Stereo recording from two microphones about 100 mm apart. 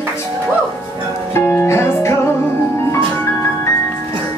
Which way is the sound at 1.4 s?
25° left (ahead or behind).